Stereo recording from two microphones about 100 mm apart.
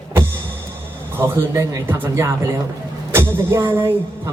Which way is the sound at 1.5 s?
35° right (ahead or behind).